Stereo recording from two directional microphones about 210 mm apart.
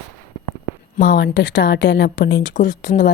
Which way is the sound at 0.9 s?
55° left (ahead or behind).